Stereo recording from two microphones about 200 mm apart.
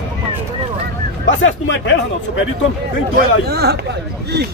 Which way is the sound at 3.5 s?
55° right (ahead or behind).